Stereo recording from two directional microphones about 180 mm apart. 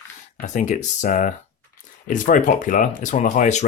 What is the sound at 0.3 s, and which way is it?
Speech, 40° left (ahead or behind).